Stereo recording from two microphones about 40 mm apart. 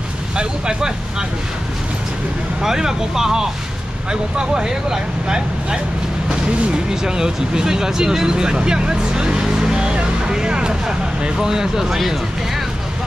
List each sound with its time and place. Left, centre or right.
0.4 s speech: centre
2.6 s speech: centre
12.0 s speech: centre